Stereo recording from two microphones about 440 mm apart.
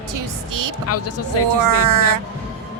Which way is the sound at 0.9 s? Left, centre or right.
Left.